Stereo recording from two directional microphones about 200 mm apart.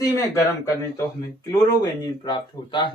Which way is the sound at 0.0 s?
15° left (ahead or behind).